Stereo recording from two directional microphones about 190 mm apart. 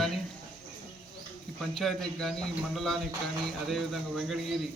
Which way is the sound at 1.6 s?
Centre (ahead or behind).